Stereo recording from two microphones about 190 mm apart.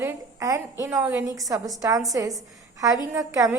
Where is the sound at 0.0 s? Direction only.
15° right (ahead or behind).